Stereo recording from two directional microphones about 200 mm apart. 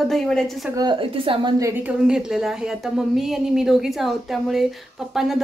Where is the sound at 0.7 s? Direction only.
20° right (ahead or behind).